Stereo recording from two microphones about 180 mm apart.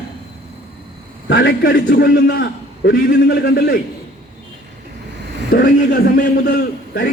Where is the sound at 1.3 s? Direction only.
85° left.